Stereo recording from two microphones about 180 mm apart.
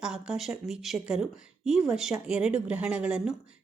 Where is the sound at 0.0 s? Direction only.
5° right (ahead or behind).